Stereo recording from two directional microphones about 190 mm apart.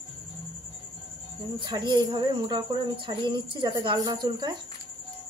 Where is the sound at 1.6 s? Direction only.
20° right (ahead or behind).